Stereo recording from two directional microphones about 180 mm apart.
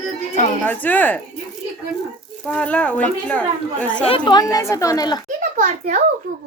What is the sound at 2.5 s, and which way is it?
Speech, 5° left (ahead or behind).